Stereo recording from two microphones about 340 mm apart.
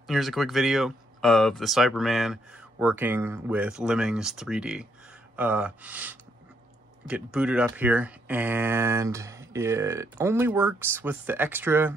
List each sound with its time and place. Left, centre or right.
0.0 s speech: centre